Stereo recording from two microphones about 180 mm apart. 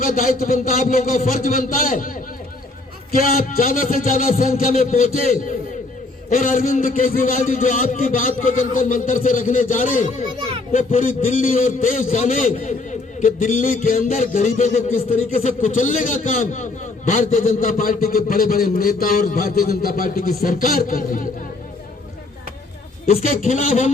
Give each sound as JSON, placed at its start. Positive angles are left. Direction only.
{"t": 0.0, "sound": "a man's voice", "side_deg": 50}
{"t": 6.3, "sound": "a man's voice", "side_deg": 50}
{"t": 23.2, "sound": "a man's voice", "side_deg": 45}